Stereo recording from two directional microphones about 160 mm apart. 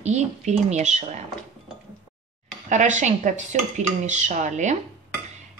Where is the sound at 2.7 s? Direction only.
50° right (ahead or behind).